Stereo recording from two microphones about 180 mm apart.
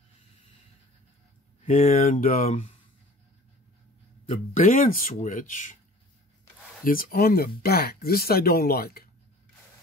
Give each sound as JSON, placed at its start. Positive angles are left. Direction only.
{"t": 1.6, "sound": "speech", "side_deg": 35}
{"t": 4.6, "sound": "speech", "side_deg": 50}
{"t": 6.8, "sound": "speech", "side_deg": 50}